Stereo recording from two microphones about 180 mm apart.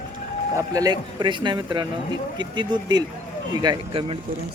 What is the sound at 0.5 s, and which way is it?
Speech, 20° right (ahead or behind).